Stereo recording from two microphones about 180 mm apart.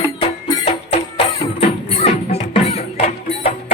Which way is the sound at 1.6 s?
30° left (ahead or behind).